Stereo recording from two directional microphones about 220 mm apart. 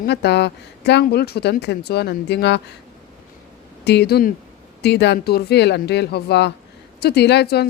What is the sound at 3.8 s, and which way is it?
Speech, 50° left (ahead or behind).